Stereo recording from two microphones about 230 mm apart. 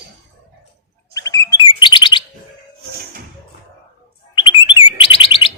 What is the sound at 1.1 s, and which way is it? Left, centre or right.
Chirp, centre.